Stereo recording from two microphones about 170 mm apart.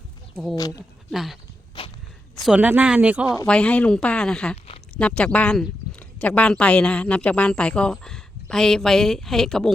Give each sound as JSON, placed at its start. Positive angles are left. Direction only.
{"t": 0.5, "sound": "speech", "side_deg": 20}
{"t": 1.1, "sound": "speech", "side_deg": 0}
{"t": 2.4, "sound": "speech", "side_deg": -5}
{"t": 3.4, "sound": "speech", "side_deg": 5}